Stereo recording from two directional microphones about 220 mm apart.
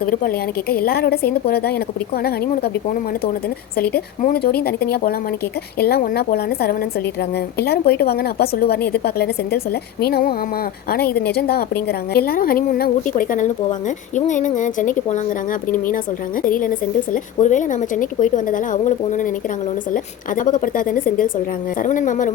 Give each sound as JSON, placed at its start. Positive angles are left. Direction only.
{"t": 0.0, "sound": "a woman's voice", "side_deg": 40}
{"t": 3.9, "sound": "a woman's voice", "side_deg": 40}
{"t": 16.4, "sound": "a woman's voice", "side_deg": 35}